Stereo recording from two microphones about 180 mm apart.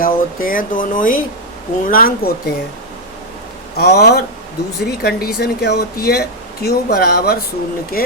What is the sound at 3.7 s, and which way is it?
Speech, 60° left (ahead or behind).